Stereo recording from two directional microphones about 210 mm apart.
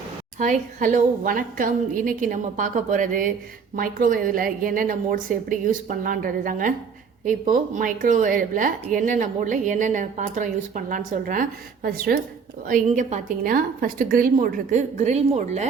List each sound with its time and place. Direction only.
0.3 s speech: 40° right (ahead or behind)